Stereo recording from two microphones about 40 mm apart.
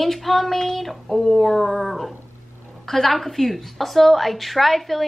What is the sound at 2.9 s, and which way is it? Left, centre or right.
A woman's voice, centre.